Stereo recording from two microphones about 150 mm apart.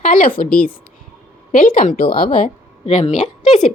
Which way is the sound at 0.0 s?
65° left (ahead or behind).